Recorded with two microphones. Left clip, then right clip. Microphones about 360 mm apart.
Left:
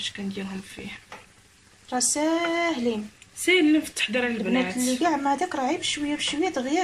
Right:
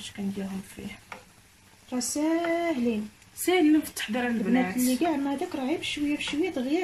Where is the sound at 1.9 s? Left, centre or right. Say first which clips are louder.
Left 3 dB; left.